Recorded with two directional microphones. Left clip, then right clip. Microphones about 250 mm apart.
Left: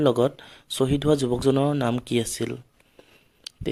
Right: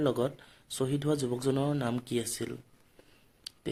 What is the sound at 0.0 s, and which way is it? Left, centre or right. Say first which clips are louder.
Speech: left 9 dB; left.